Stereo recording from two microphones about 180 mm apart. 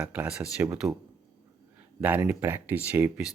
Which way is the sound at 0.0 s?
5° right (ahead or behind).